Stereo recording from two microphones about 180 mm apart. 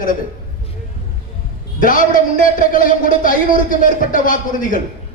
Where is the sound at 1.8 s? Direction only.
50° left (ahead or behind).